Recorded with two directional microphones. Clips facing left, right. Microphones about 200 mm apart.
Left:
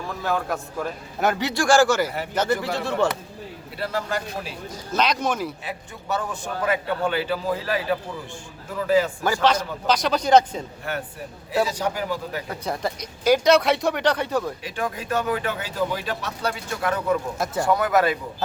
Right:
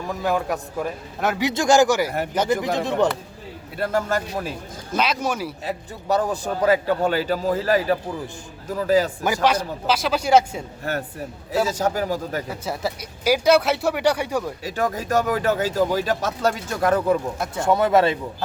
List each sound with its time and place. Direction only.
0.1 s speech: 15° right (ahead or behind)
3.8 s speech: 50° right (ahead or behind)
4.9 s speech: 10° right (ahead or behind)
5.6 s speech: 35° right (ahead or behind)
9.2 s speech: 15° right (ahead or behind)
10.9 s speech: 40° right (ahead or behind)
12.5 s speech: 5° right (ahead or behind)
14.6 s speech: 40° right (ahead or behind)
17.3 s speech: centre (ahead or behind)
17.7 s a man's voice: 25° right (ahead or behind)